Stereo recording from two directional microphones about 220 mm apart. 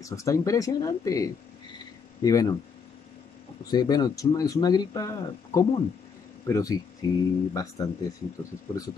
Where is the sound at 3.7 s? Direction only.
15° left (ahead or behind).